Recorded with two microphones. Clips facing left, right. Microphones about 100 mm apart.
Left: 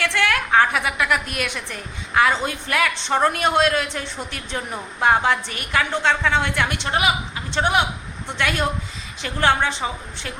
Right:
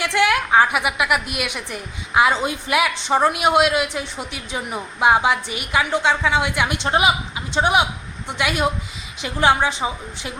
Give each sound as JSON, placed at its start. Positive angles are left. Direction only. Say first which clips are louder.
{"t": 0.0, "sound": "a woman's voice", "louder": "right 3 dB", "side_deg": -15}
{"t": 6.8, "sound": "a woman's voice", "louder": "right 5 dB", "side_deg": -25}